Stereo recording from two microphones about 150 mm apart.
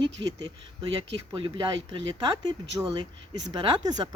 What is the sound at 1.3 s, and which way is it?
Speech, 35° right (ahead or behind).